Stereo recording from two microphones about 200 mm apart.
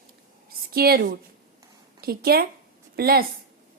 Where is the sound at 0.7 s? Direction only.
50° right (ahead or behind).